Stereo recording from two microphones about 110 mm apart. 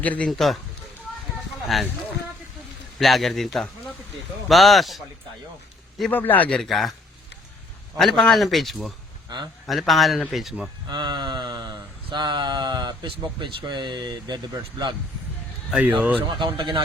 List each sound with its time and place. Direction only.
0.0 s a man's voice: 15° left (ahead or behind)
0.3 s a man's voice: centre (ahead or behind)
1.6 s speech: centre (ahead or behind)
3.0 s a man's voice: centre (ahead or behind)
6.1 s a man's voice: 15° left (ahead or behind)
6.6 s a man's voice: centre (ahead or behind)
7.9 s a man's voice: 5° left (ahead or behind)
10.8 s a sound: 45° right (ahead or behind)
16.2 s a sound: 45° right (ahead or behind)